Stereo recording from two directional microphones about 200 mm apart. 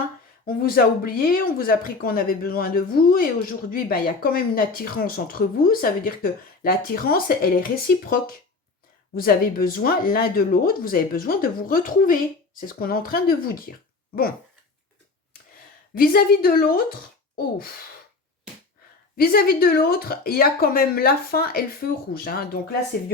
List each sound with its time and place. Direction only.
0.4 s speech: 45° left (ahead or behind)
16.0 s speech: 50° left (ahead or behind)
19.1 s speech: 50° left (ahead or behind)